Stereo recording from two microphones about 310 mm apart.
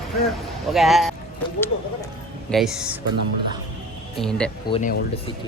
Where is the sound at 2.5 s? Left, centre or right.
Centre.